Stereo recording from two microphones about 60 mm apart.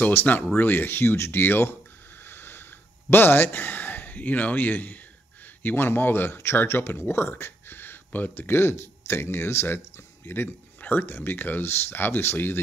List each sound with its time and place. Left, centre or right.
0.0 s speech: left
2.2 s a sound: left
3.1 s speech: left